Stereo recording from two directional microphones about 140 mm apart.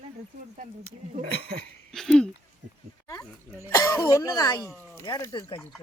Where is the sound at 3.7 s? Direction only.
25° left (ahead or behind).